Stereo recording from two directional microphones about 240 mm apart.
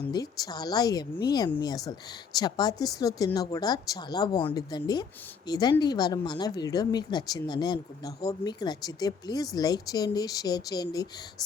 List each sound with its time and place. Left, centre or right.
0.1 s speech: centre